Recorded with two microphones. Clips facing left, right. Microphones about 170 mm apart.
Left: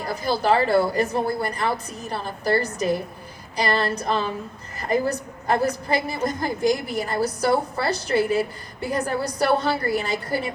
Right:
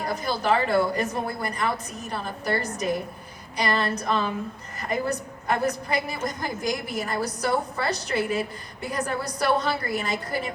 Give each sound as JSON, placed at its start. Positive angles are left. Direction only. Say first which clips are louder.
{"t": 0.3, "sound": "a woman's voice", "louder": "left 4 dB", "side_deg": 35}